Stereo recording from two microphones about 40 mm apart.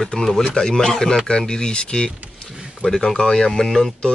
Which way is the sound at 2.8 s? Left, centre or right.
Centre.